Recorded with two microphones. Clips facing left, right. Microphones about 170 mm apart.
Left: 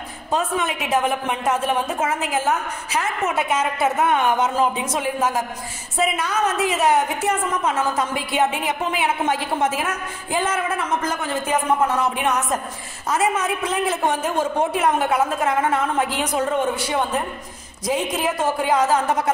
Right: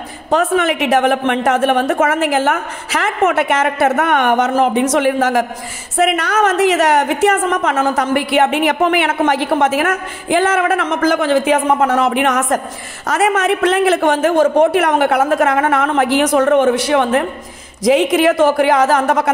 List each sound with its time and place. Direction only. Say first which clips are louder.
0.3 s a woman's voice: right 8 dB; 75° right (ahead or behind)
5.9 s a woman's voice: right 7 dB; 75° right (ahead or behind)